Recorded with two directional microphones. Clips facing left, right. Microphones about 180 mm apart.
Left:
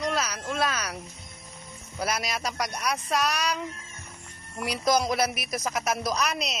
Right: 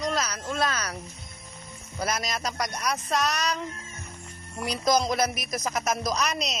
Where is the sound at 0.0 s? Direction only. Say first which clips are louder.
Even; 5° left (ahead or behind).